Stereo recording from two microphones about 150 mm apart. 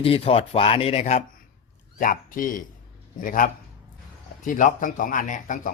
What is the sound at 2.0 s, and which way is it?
Speech, 65° left (ahead or behind).